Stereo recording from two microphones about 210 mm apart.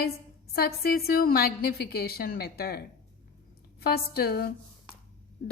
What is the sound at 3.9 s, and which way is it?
Speech, 45° left (ahead or behind).